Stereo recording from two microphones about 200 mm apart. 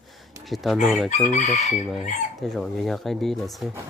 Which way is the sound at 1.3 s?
35° left (ahead or behind).